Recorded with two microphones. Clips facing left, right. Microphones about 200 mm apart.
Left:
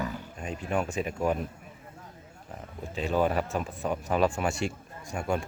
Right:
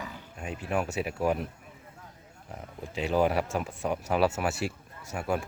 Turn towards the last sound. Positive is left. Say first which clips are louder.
# left 1 dB
turn(degrees=-5)  # may be behind; listen again after turning